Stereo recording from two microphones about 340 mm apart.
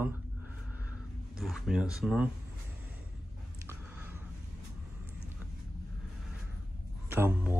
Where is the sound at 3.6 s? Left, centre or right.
Centre.